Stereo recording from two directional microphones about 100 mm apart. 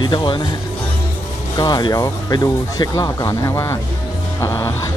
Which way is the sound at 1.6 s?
40° left (ahead or behind).